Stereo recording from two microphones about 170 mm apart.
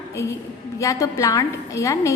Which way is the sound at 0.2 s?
15° left (ahead or behind).